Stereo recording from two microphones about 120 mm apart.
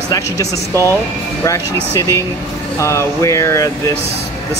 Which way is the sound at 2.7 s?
25° left (ahead or behind).